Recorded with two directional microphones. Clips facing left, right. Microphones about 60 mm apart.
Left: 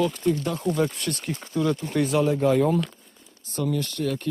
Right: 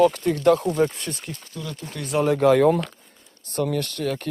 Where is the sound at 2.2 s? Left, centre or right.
Right.